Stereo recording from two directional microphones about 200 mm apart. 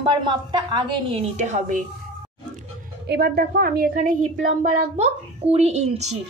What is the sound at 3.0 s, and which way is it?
A woman's voice, 55° right (ahead or behind).